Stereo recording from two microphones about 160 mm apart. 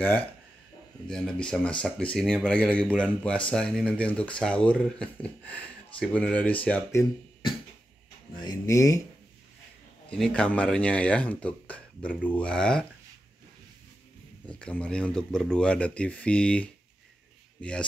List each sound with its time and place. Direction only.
1.0 s speech: 5° left (ahead or behind)
8.4 s speech: 25° left (ahead or behind)
10.0 s speech: 5° left (ahead or behind)
14.4 s speech: 10° left (ahead or behind)